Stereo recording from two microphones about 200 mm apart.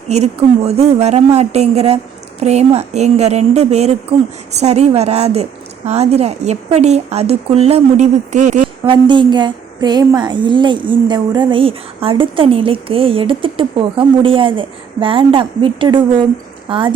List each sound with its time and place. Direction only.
0.1 s a woman's voice: 30° right (ahead or behind)
8.8 s a woman's voice: 25° right (ahead or behind)